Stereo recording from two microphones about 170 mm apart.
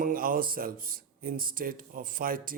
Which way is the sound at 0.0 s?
55° right (ahead or behind).